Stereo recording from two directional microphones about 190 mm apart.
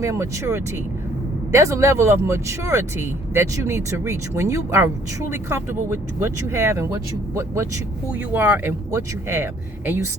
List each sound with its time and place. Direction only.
0.0 s speech: 15° right (ahead or behind)